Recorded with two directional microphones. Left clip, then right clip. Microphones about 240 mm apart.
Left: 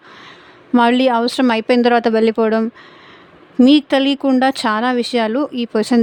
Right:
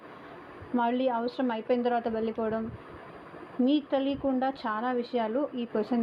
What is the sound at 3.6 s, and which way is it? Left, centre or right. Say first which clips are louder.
Speech: left 15 dB; left.